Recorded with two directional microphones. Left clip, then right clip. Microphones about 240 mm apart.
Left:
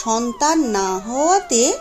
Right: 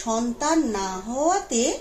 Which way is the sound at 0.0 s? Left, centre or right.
Left.